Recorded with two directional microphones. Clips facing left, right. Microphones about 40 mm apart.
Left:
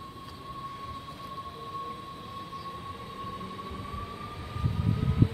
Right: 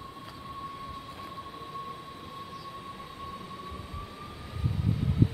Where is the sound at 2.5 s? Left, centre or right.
Centre.